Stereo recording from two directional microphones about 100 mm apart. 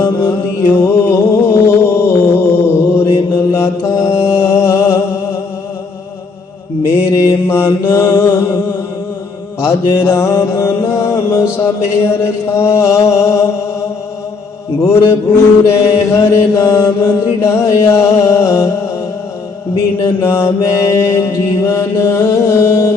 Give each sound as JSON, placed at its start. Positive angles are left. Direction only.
{"t": 0.0, "sound": "mantra", "side_deg": 25}
{"t": 4.2, "sound": "music", "side_deg": 25}
{"t": 6.8, "sound": "mantra", "side_deg": 30}
{"t": 9.6, "sound": "music", "side_deg": 25}
{"t": 15.6, "sound": "mantra", "side_deg": 30}
{"t": 20.0, "sound": "mantra", "side_deg": 25}